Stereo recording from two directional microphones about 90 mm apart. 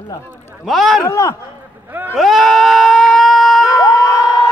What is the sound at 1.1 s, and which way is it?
Speech, 35° left (ahead or behind).